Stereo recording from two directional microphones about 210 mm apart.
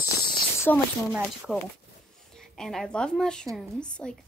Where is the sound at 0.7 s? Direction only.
10° left (ahead or behind).